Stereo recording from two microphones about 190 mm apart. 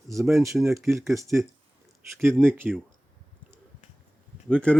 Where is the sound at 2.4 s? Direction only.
10° right (ahead or behind).